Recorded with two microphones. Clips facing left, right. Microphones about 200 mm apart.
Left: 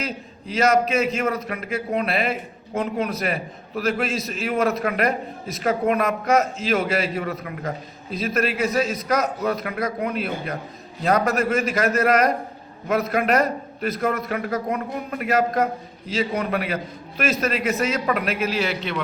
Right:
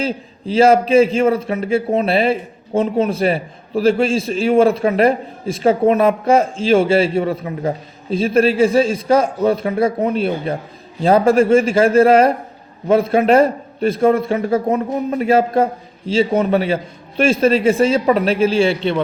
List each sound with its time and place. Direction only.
0.0 s a man's voice: 30° right (ahead or behind)